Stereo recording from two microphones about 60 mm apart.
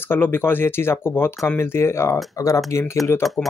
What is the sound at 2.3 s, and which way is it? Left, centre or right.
Speech, left.